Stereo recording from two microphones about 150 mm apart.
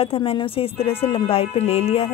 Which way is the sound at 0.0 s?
40° left (ahead or behind).